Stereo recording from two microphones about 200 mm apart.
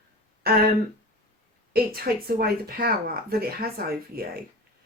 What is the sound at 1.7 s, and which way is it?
Speech, 50° right (ahead or behind).